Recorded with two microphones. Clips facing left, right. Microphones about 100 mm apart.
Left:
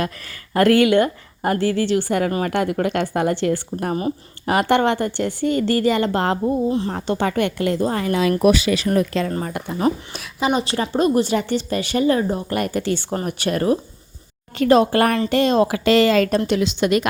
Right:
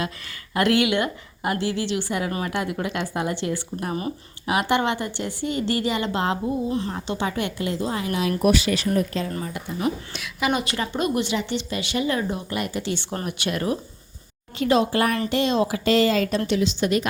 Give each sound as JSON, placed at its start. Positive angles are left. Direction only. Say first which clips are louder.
{"t": 0.0, "sound": "speech", "louder": "left 4 dB", "side_deg": 45}
{"t": 6.7, "sound": "a woman's voice", "louder": "left 5 dB", "side_deg": 30}
{"t": 6.9, "sound": "speech", "louder": "left 6 dB", "side_deg": 55}
{"t": 8.9, "sound": "a woman's voice", "louder": "left 5 dB", "side_deg": 70}
{"t": 9.4, "sound": "speech", "louder": "left 4 dB", "side_deg": 55}
{"t": 9.8, "sound": "a woman's voice", "louder": "left 6 dB", "side_deg": 35}
{"t": 14.6, "sound": "a woman's voice", "louder": "left 5 dB", "side_deg": 55}